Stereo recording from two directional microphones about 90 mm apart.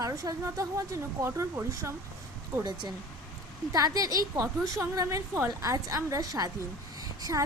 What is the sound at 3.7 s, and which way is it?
A woman's voice, 40° right (ahead or behind).